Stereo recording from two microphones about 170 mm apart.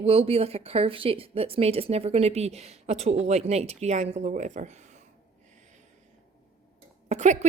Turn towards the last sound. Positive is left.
turn(degrees=-45)  # may be behind; listen again after turning